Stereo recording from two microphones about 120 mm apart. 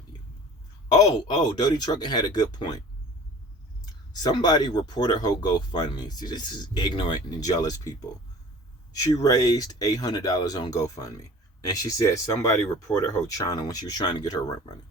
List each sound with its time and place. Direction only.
0.1 s a sound: 40° left (ahead or behind)
0.9 s speech: 35° left (ahead or behind)
4.1 s speech: 35° left (ahead or behind)
9.1 s speech: 30° left (ahead or behind)